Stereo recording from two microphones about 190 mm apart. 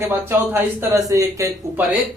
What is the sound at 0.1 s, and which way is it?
Speech, 10° right (ahead or behind).